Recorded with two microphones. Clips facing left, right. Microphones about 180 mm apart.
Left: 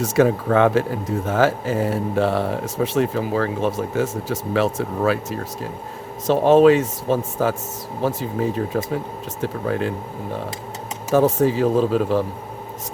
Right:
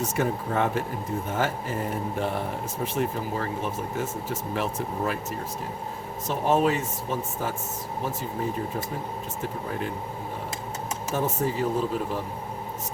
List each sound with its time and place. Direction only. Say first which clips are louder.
0.0 s speech: left 9 dB; 90° left
11.1 s speech: left 11 dB; 90° left